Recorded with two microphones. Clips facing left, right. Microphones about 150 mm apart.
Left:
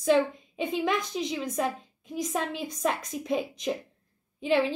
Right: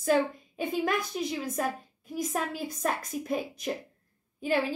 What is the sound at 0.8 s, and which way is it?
A woman's voice, 5° right (ahead or behind).